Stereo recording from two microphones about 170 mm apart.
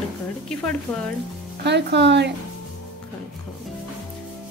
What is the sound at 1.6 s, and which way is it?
Speech, 85° right.